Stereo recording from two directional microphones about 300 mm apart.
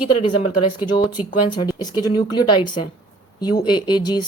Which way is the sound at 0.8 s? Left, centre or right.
Centre.